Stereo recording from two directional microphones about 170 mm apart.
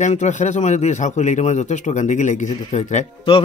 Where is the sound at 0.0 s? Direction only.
45° left (ahead or behind).